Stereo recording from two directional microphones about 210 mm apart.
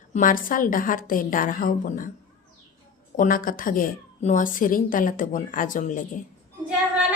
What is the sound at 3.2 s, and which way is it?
A woman's voice, 40° left (ahead or behind).